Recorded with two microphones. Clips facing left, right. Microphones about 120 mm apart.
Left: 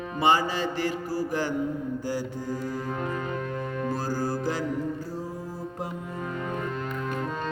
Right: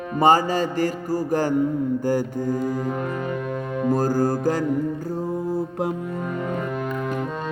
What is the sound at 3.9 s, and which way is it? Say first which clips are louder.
Music: right 10 dB; 50° right (ahead or behind).